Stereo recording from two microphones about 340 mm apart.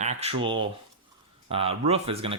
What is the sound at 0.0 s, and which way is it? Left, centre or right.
Speech, centre.